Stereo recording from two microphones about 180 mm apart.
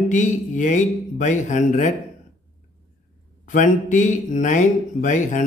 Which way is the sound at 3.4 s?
45° left (ahead or behind).